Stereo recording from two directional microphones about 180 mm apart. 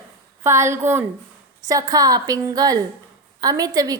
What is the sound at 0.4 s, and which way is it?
A woman's voice, 15° right (ahead or behind).